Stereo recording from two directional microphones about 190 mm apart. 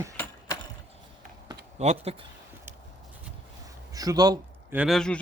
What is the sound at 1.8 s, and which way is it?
Speech, 35° right (ahead or behind).